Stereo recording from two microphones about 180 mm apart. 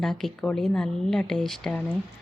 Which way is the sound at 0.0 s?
Centre (ahead or behind).